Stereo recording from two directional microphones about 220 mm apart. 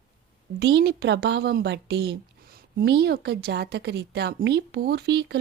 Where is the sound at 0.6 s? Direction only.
50° right (ahead or behind).